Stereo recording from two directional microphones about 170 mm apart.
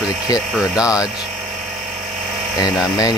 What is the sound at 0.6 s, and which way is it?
Speech, 5° right (ahead or behind).